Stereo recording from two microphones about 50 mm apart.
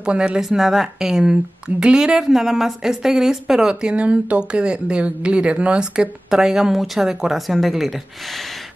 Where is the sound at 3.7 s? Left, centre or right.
Right.